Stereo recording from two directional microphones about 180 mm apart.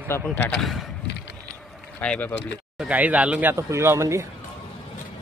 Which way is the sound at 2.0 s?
10° left (ahead or behind).